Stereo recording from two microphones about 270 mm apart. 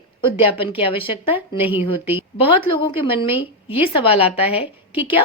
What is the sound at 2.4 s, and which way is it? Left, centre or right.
Speech, left.